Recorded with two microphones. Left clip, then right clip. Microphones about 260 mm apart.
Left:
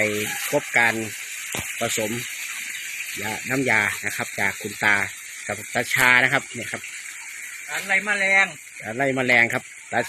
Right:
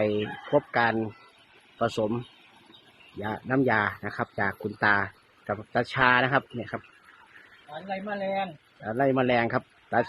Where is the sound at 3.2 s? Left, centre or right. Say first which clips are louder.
Left 1 dB; centre.